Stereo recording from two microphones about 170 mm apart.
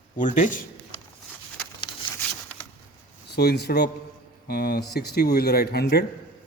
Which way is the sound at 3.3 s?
70° left (ahead or behind).